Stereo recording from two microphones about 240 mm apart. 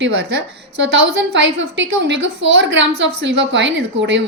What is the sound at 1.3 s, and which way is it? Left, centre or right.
A woman's voice, right.